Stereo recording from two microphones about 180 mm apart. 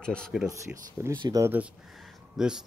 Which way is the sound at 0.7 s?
5° right (ahead or behind).